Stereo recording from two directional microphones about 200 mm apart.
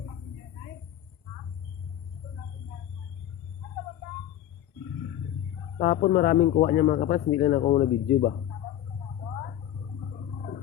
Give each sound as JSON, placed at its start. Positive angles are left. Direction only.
{"t": 5.8, "sound": "speech", "side_deg": 40}